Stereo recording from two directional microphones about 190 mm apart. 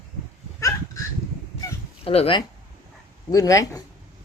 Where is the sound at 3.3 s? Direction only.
20° left (ahead or behind).